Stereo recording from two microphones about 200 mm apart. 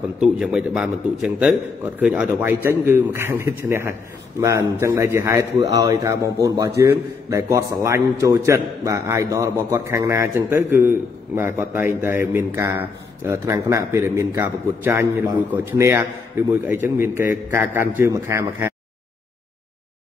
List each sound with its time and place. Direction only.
0.2 s a man's voice: 5° right (ahead or behind)
5.5 s a man's voice: 60° left (ahead or behind)
5.8 s a man's voice: 20° right (ahead or behind)